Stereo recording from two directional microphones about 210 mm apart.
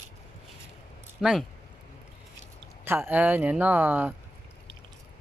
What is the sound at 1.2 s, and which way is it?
Speech, centre (ahead or behind).